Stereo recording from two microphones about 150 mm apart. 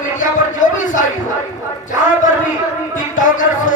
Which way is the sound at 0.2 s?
60° left (ahead or behind).